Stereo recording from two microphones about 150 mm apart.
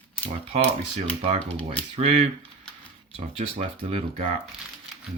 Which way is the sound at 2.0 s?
45° right (ahead or behind).